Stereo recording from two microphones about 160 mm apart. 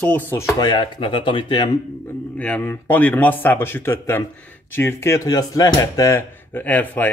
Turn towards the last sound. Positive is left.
turn(degrees=10)  # may be behind; listen again after turning